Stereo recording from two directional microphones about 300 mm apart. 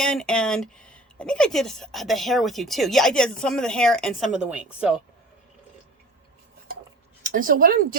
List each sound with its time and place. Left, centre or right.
0.0 s speech: centre
7.2 s speech: right